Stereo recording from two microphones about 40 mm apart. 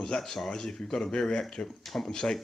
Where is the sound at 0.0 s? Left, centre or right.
Centre.